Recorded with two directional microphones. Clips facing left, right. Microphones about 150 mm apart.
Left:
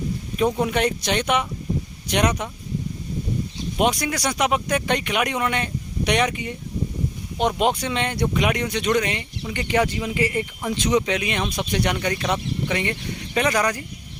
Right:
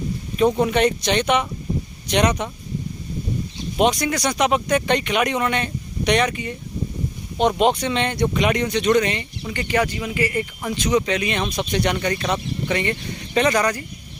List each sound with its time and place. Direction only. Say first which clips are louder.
0.3 s speech: right 4 dB; 5° left (ahead or behind)
3.8 s speech: right 3 dB; 10° left (ahead or behind)
9.5 s speech: even; 20° left (ahead or behind)